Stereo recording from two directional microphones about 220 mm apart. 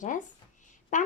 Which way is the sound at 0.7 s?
35° left (ahead or behind).